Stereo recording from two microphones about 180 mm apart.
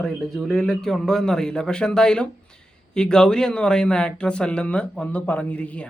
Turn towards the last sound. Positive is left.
turn(degrees=5)  # may be behind; listen again after turning